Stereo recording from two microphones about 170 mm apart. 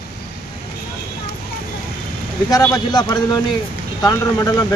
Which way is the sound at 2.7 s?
25° left (ahead or behind).